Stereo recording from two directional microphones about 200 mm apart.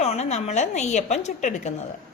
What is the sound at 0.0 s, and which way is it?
A woman's voice, 35° left (ahead or behind).